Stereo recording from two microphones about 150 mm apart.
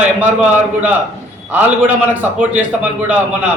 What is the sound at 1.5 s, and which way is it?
A man's voice, 10° right (ahead or behind).